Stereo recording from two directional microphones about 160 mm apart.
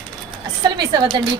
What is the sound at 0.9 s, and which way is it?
Speech, 25° right (ahead or behind).